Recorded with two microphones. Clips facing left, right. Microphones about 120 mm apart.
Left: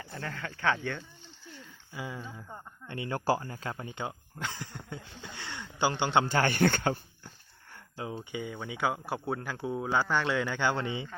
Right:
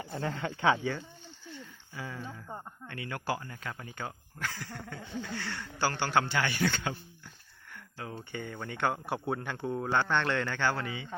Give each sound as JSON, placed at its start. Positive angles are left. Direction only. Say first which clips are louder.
{"t": 0.0, "sound": "speech", "louder": "right 5 dB", "side_deg": -25}
{"t": 1.5, "sound": "a sound", "louder": "left 2 dB", "side_deg": 10}
{"t": 2.9, "sound": "speech", "louder": "left 6 dB", "side_deg": 25}
{"t": 6.2, "sound": "speech", "louder": "left 4 dB", "side_deg": 45}
{"t": 8.2, "sound": "speech", "louder": "left 2 dB", "side_deg": 10}